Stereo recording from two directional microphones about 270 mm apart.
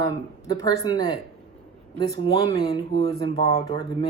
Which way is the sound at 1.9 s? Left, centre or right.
Centre.